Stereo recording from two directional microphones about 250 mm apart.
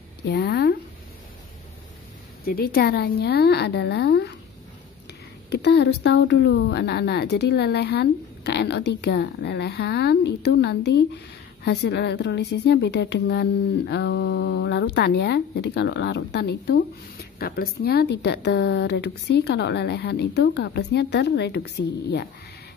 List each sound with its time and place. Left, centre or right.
0.3 s a sound: left
2.4 s speech: left
5.5 s a woman's voice: left